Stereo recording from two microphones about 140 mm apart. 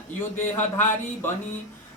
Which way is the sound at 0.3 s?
15° left (ahead or behind).